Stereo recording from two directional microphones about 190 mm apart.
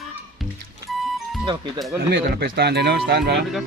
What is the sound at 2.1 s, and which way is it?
Speech, 60° right (ahead or behind).